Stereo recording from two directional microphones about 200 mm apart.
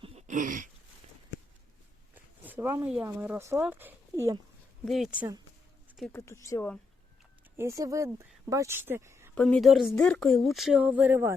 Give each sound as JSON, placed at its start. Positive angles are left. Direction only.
{"t": 0.0, "sound": "throat clearing", "side_deg": -30}
{"t": 2.1, "sound": "speech", "side_deg": -10}
{"t": 6.0, "sound": "speech", "side_deg": 10}
{"t": 7.5, "sound": "speech", "side_deg": -15}
{"t": 9.3, "sound": "speech", "side_deg": 5}